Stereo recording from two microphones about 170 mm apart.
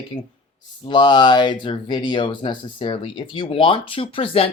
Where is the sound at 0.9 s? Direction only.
25° left (ahead or behind).